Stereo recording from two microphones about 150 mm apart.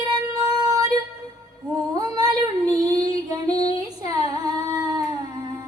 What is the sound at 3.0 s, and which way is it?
Female singing, 40° left (ahead or behind).